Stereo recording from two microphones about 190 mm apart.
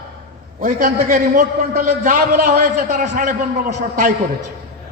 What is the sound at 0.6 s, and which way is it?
A man's voice, 45° right (ahead or behind).